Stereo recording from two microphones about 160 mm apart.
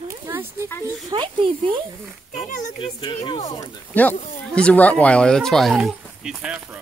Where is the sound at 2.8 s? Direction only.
30° left (ahead or behind).